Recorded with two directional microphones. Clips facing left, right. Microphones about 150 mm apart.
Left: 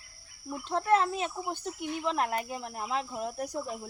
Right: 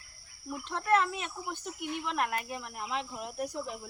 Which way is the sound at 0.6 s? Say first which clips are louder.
Left 2 dB; 35° left (ahead or behind).